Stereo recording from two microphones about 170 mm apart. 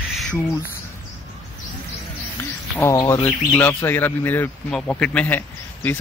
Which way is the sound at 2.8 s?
15° left (ahead or behind).